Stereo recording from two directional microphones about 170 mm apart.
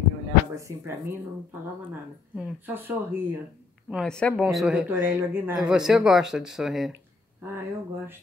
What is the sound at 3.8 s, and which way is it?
Speech, centre (ahead or behind).